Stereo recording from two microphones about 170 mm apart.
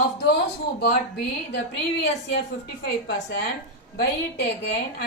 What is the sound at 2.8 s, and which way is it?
Speech, 75° left (ahead or behind).